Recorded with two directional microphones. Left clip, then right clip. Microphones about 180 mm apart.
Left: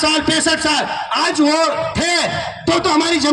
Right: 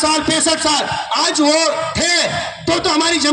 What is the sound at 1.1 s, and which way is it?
A man's voice, 45° left (ahead or behind).